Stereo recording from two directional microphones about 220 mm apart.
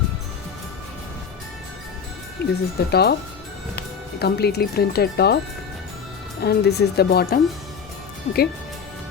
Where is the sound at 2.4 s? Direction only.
45° left (ahead or behind).